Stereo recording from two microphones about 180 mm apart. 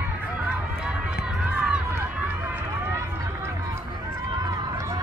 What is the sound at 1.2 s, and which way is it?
Run, 5° right (ahead or behind).